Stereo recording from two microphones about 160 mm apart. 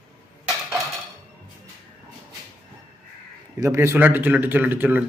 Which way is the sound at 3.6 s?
15° right (ahead or behind).